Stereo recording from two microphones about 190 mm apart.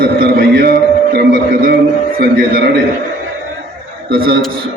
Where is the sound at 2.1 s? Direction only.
50° right (ahead or behind).